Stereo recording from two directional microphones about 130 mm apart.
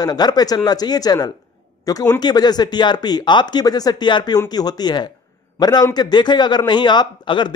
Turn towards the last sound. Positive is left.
turn(degrees=35)  # may be behind; listen again after turning